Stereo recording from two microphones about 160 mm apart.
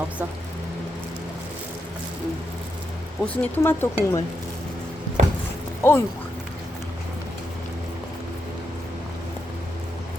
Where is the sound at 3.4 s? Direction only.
10° left (ahead or behind).